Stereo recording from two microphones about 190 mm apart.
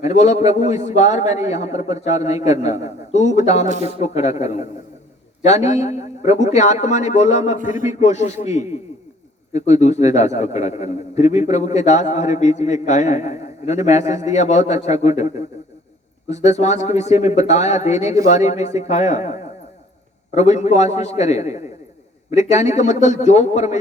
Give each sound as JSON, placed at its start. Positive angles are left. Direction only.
{"t": 0.0, "sound": "a man's voice", "side_deg": 35}
{"t": 3.7, "sound": "speech", "side_deg": -35}
{"t": 4.0, "sound": "a man's voice", "side_deg": 35}
{"t": 16.3, "sound": "a man's voice", "side_deg": 35}